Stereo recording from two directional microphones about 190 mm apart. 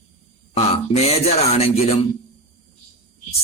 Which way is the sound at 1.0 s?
35° left (ahead or behind).